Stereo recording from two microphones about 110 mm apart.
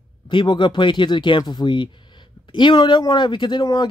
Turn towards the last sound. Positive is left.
turn(degrees=40)  # may be behind; listen again after turning